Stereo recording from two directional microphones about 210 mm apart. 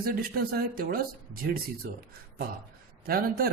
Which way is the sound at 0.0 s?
45° right (ahead or behind).